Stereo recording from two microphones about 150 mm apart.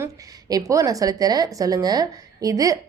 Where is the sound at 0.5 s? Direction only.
20° right (ahead or behind).